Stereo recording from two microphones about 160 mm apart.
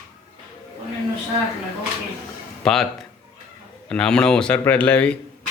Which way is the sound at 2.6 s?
5° left (ahead or behind).